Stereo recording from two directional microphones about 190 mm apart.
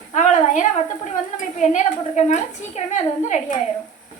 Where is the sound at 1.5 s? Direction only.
40° left (ahead or behind).